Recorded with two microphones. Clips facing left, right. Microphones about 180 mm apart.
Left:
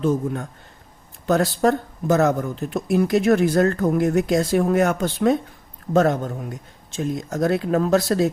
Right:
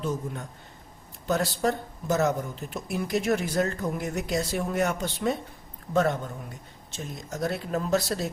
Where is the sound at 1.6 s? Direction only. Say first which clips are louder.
Left 8 dB; 75° left (ahead or behind).